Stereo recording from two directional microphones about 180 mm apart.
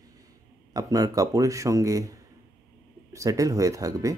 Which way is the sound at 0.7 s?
20° right (ahead or behind).